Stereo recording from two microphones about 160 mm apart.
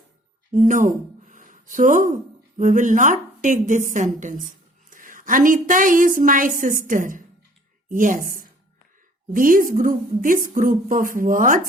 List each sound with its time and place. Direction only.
0.5 s a woman's voice: 50° right (ahead or behind)